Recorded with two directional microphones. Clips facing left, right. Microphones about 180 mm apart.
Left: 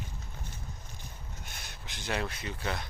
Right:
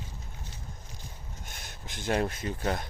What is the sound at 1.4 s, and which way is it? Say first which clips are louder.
Speech: right 2 dB; 50° right (ahead or behind).